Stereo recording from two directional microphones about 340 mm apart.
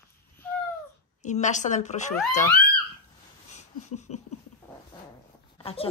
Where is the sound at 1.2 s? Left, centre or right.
Left.